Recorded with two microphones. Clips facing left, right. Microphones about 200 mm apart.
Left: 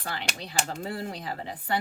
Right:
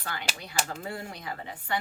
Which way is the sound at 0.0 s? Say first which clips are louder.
Left 2 dB; 30° left (ahead or behind).